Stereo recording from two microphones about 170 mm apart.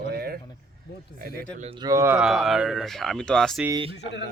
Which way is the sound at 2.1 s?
Centre (ahead or behind).